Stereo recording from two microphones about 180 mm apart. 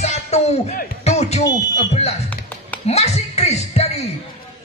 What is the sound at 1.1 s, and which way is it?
Fire alarm, 40° left (ahead or behind).